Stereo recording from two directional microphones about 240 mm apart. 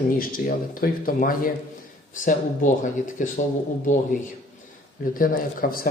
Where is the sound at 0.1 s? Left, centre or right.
Left.